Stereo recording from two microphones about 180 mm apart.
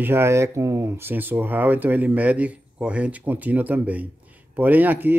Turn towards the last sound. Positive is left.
turn(degrees=-10)  # may be behind; listen again after turning